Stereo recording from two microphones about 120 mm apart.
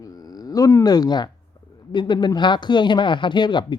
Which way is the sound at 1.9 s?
40° left (ahead or behind).